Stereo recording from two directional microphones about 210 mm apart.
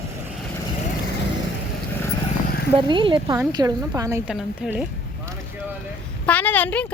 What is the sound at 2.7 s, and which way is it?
A woman's voice, 25° right (ahead or behind).